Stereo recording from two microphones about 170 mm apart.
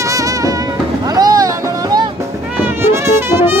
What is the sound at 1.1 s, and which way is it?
Music, 20° right (ahead or behind).